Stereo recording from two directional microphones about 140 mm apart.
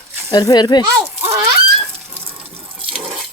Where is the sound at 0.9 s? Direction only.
15° right (ahead or behind).